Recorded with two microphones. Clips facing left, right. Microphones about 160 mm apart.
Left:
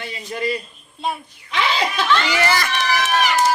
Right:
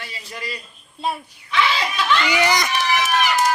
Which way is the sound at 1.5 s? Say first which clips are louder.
Even; 40° left (ahead or behind).